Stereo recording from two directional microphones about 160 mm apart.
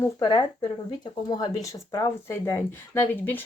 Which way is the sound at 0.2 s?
30° left (ahead or behind).